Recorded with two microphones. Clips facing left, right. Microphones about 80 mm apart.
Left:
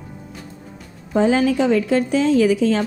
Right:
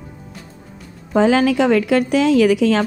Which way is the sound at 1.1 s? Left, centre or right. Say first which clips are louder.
Right 2 dB; right.